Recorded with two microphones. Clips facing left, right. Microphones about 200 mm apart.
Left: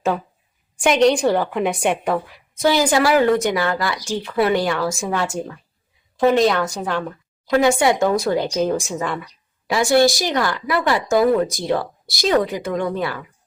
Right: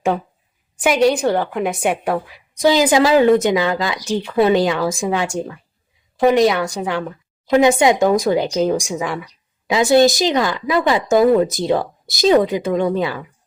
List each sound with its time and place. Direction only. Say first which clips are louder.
0.8 s a woman's voice: even; 5° right (ahead or behind)
2.6 s a woman's voice: right 3 dB; 20° right (ahead or behind)